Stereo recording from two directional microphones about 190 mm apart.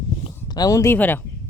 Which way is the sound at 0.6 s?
15° left (ahead or behind).